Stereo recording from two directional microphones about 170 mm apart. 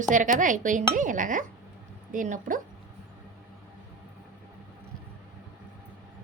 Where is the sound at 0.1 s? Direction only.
50° right (ahead or behind).